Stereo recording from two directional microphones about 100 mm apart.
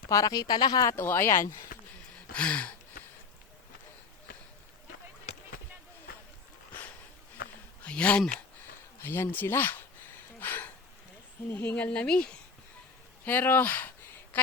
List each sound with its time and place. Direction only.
0.1 s speech: 35° left (ahead or behind)
0.9 s speech: 20° left (ahead or behind)
2.3 s speech: 10° left (ahead or behind)
7.9 s speech: 10° left (ahead or behind)
9.0 s speech: 25° left (ahead or behind)
10.4 s a sound: 20° left (ahead or behind)
11.5 s speech: 15° left (ahead or behind)